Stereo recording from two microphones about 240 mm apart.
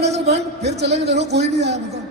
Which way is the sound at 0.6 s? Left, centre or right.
Right.